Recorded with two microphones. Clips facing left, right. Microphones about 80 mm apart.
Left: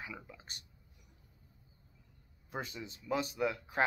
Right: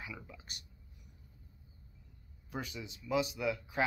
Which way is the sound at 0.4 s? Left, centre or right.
Left.